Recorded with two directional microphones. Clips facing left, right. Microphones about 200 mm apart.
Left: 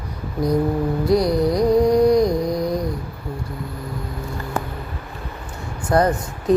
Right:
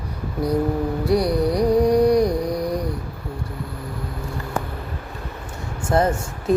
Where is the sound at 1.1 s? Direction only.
10° right (ahead or behind).